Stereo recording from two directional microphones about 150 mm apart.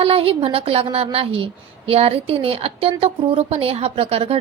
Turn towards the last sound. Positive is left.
turn(degrees=-40)  # may be behind; listen again after turning